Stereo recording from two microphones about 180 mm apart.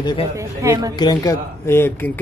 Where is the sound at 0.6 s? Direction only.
15° right (ahead or behind).